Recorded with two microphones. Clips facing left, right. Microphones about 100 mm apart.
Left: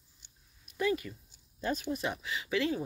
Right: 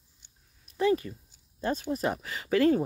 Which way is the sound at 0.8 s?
35° right (ahead or behind).